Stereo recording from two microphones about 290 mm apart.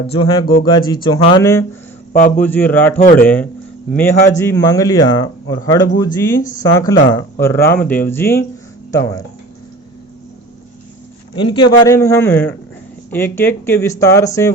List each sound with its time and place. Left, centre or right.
0.1 s speech: centre
2.1 s speech: left
2.4 s speech: centre
3.0 s speech: left
3.2 s speech: centre
11.3 s speech: centre